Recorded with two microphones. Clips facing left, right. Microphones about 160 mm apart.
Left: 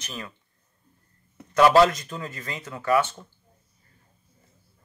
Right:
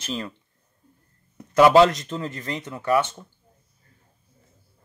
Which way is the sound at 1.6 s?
20° right (ahead or behind).